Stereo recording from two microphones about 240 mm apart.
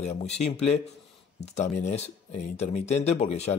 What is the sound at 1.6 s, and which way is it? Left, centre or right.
Speech, left.